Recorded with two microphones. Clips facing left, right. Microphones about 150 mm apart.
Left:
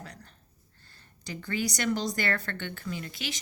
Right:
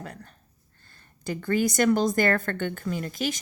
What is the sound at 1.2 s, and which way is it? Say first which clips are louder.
A woman's voice: right 8 dB; 50° right (ahead or behind).